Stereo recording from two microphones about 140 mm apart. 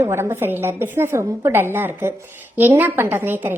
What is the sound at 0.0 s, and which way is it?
A woman's voice, 15° right (ahead or behind).